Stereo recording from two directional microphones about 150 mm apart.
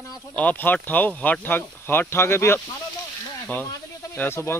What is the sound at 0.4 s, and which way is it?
Speech, 10° left (ahead or behind).